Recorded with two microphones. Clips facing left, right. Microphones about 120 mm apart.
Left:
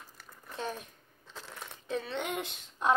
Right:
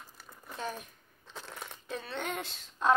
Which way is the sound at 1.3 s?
Centre (ahead or behind).